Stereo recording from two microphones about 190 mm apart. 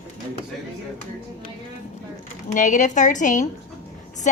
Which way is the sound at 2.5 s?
40° left (ahead or behind).